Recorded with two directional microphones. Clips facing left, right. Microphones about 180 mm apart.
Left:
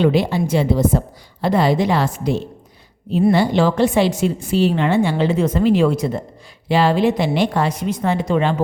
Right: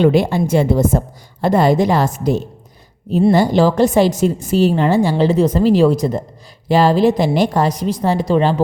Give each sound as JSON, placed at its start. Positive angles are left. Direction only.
{"t": 0.0, "sound": "a woman's voice", "side_deg": -50}